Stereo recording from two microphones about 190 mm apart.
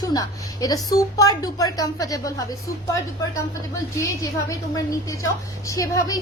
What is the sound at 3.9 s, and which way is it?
A woman's voice, 20° left (ahead or behind).